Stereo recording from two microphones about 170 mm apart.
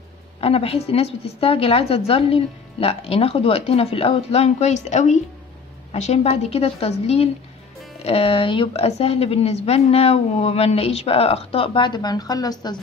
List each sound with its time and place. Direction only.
0.4 s a woman's voice: 35° left (ahead or behind)